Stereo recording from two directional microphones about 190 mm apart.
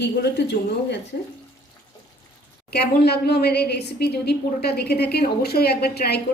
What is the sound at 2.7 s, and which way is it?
A woman's voice, 60° left (ahead or behind).